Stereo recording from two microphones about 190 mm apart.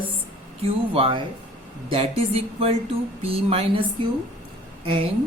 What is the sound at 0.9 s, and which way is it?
A woman's voice, 30° right (ahead or behind).